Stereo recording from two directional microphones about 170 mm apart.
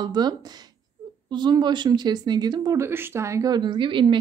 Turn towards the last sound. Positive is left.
turn(degrees=-30)  # may be behind; listen again after turning